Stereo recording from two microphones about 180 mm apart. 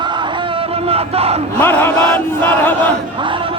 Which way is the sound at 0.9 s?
35° right (ahead or behind).